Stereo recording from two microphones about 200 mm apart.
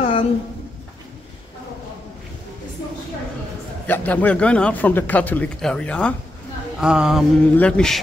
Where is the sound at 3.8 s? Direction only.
10° left (ahead or behind).